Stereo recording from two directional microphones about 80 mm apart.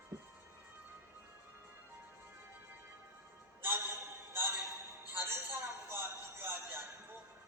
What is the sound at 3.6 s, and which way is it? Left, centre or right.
Music, right.